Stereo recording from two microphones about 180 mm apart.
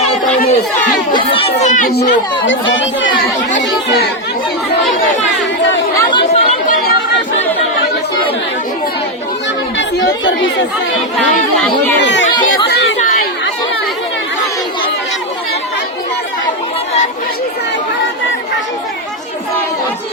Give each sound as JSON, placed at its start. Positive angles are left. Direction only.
{"t": 0.3, "sound": "speech", "side_deg": 50}
{"t": 1.1, "sound": "speech", "side_deg": 30}
{"t": 2.5, "sound": "speech", "side_deg": 90}
{"t": 6.0, "sound": "chatter", "side_deg": 25}
{"t": 6.5, "sound": "chatter", "side_deg": 50}
{"t": 9.7, "sound": "speech", "side_deg": 90}
{"t": 11.9, "sound": "speech", "side_deg": 80}
{"t": 12.6, "sound": "chatter", "side_deg": 80}